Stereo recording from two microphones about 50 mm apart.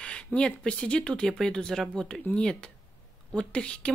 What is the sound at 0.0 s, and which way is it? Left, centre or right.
A woman's voice, left.